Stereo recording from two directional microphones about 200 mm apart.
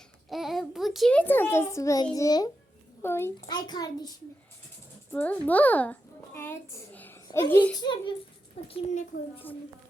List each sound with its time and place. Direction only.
0.3 s a child's voice: centre (ahead or behind); by 4.1 s 20° left (ahead or behind)
5.1 s a child's voice: 10° left (ahead or behind)
7.8 s a child's voice: 20° left (ahead or behind)